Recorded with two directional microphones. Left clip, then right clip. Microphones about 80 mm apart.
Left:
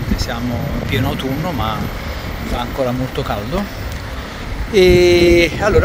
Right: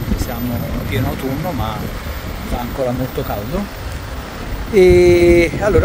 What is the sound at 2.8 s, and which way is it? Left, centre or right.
Speech, right.